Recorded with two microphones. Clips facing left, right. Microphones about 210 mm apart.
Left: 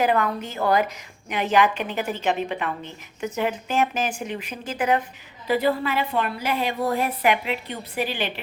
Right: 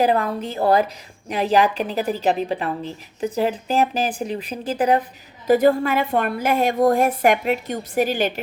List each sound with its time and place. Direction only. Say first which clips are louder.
0.0 s a woman's voice: right 3 dB; 35° right (ahead or behind)
5.5 s a woman's voice: right 6 dB; 45° right (ahead or behind)